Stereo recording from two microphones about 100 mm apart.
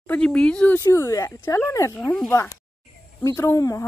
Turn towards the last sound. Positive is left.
turn(degrees=35)  # may be behind; listen again after turning